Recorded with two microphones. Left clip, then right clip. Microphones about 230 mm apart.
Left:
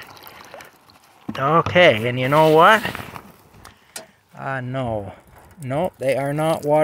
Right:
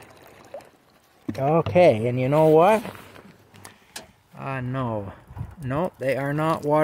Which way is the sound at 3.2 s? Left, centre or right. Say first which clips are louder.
Left 9 dB; left.